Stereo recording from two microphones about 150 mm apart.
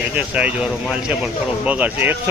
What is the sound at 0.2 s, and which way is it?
Speech, 10° right (ahead or behind).